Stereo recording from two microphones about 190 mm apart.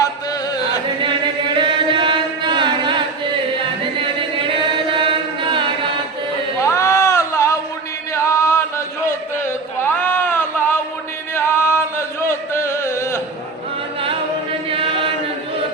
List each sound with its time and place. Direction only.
1.0 s chant: 25° right (ahead or behind)
4.4 s chant: 25° right (ahead or behind)
6.7 s a sound: 15° left (ahead or behind)
8.1 s chant: 15° left (ahead or behind)
9.0 s a sound: 10° left (ahead or behind)
11.3 s music: 15° left (ahead or behind)
14.7 s chant: 30° right (ahead or behind)